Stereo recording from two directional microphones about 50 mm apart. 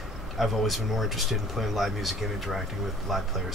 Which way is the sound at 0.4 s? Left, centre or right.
Centre.